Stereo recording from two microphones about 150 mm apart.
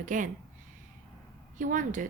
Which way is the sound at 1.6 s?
60° right (ahead or behind).